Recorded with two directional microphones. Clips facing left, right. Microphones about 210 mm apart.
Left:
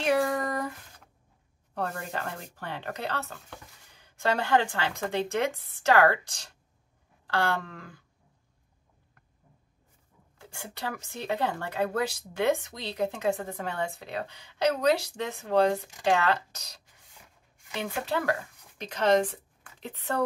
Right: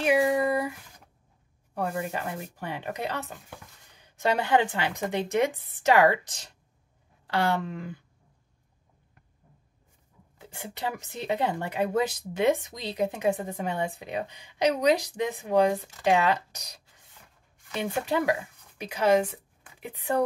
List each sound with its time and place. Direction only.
0.0 s a sound: 10° right (ahead or behind)
1.8 s speech: 10° right (ahead or behind)
10.4 s speech: 20° right (ahead or behind)